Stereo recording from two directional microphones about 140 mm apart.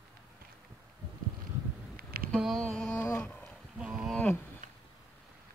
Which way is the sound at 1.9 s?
90° right.